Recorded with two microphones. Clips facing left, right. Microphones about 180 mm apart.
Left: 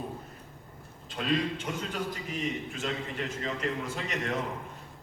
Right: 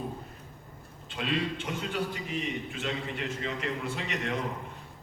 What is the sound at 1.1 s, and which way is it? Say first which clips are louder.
A man's voice: left 2 dB; 40° left (ahead or behind).